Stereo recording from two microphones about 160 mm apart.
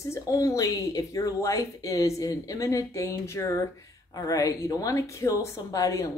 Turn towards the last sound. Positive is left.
turn(degrees=20)  # may be behind; listen again after turning